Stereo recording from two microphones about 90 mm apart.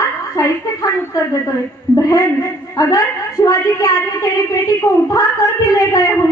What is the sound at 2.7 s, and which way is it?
Speech, 40° left (ahead or behind).